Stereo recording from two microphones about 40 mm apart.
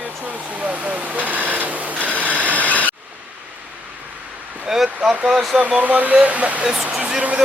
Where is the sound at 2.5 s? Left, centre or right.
Left.